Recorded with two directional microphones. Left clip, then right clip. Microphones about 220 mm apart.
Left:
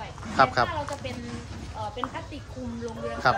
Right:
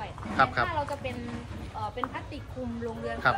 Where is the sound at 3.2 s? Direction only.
10° left (ahead or behind).